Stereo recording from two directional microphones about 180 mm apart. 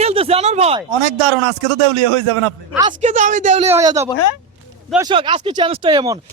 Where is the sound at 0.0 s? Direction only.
35° right (ahead or behind).